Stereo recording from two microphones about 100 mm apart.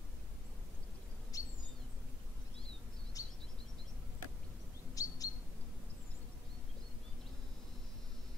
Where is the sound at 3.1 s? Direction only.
35° left (ahead or behind).